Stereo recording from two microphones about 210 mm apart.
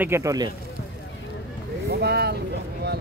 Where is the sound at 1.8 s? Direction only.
50° right (ahead or behind).